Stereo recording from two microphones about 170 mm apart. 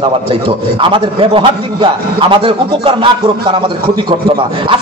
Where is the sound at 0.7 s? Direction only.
30° right (ahead or behind).